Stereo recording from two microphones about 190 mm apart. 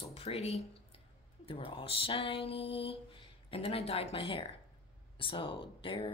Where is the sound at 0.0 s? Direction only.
30° left (ahead or behind).